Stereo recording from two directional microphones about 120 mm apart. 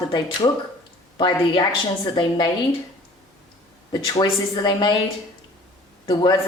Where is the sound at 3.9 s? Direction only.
35° left (ahead or behind).